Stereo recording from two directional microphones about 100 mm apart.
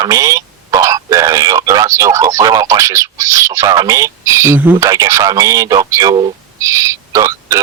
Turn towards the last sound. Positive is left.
turn(degrees=-30)  # may be behind; listen again after turning